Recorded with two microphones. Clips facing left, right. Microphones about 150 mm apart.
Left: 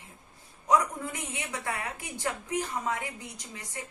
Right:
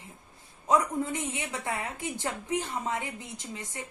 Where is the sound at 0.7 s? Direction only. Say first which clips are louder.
Right 1 dB; 25° right (ahead or behind).